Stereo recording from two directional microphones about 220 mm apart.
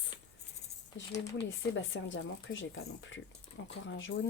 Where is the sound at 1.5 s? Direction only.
55° left (ahead or behind).